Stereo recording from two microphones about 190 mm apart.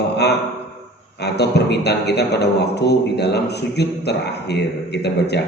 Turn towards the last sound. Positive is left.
turn(degrees=60)  # may be behind; listen again after turning